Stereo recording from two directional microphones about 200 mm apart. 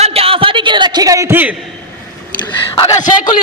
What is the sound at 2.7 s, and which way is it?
Speech, 20° left (ahead or behind).